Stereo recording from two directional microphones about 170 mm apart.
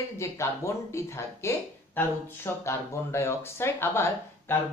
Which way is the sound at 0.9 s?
15° left (ahead or behind).